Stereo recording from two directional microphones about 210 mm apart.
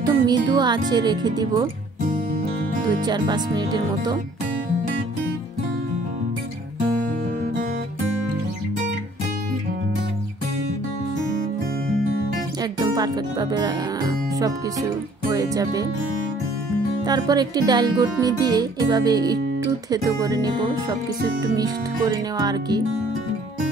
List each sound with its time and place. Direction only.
0.0 s speech: 20° right (ahead or behind)
2.8 s speech: 20° right (ahead or behind)
12.8 s music: 20° right (ahead or behind)
17.0 s music: 20° right (ahead or behind)
21.5 s music: 15° right (ahead or behind)